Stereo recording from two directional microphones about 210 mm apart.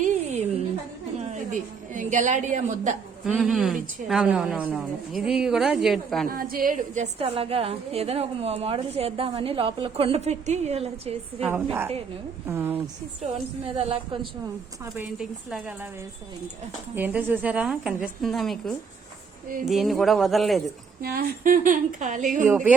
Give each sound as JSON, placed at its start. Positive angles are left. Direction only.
{"t": 0.0, "sound": "a sound", "side_deg": -35}
{"t": 1.3, "sound": "a woman's voice", "side_deg": -35}
{"t": 3.2, "sound": "a woman's voice", "side_deg": 0}
{"t": 6.2, "sound": "a woman's voice", "side_deg": -45}
{"t": 11.3, "sound": "a woman's voice", "side_deg": -5}
{"t": 13.2, "sound": "a woman's voice", "side_deg": -30}
{"t": 14.9, "sound": "a woman's voice", "side_deg": 0}
{"t": 16.9, "sound": "a woman's voice", "side_deg": -10}
{"t": 21.0, "sound": "a woman's voice", "side_deg": -45}